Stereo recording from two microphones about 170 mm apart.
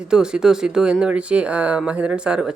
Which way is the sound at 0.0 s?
5° right (ahead or behind).